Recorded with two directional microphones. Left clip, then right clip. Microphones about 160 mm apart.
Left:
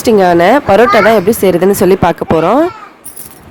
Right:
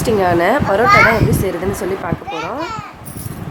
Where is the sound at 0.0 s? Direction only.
45° left (ahead or behind).